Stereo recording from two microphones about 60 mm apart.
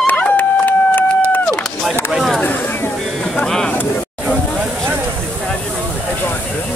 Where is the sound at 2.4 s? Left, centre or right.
Left.